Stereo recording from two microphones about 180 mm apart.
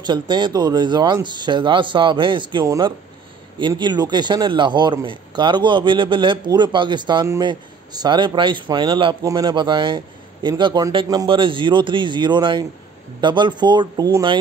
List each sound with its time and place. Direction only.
0.0 s a man's voice: 25° right (ahead or behind)